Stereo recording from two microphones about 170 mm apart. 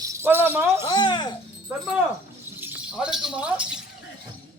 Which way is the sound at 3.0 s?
5° right (ahead or behind).